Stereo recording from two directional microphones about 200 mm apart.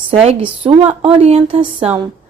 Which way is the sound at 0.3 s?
30° right (ahead or behind).